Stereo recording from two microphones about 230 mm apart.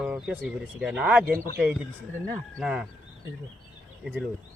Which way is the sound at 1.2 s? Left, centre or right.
Right.